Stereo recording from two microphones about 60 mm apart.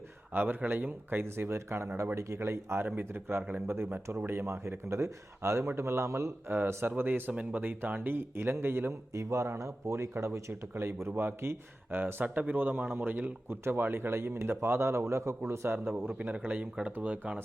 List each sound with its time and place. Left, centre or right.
0.3 s speech: right
2.8 s speech: right
3.1 s speech: right
6.5 s speech: right
9.1 s speech: right
10.5 s speech: right
12.2 s speech: right
16.1 s speech: right